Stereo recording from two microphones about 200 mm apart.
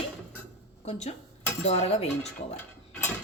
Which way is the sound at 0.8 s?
35° left (ahead or behind).